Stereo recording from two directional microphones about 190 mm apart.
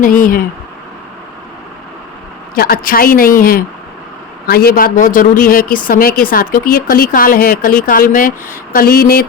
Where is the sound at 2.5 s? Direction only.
50° left (ahead or behind).